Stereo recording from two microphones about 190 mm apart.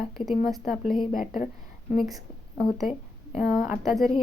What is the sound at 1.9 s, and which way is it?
Speech, centre (ahead or behind).